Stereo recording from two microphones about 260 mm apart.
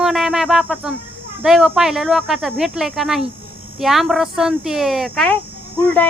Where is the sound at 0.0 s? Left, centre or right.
Centre.